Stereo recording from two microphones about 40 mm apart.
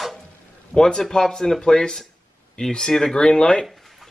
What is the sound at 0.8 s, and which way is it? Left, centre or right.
Speech, centre.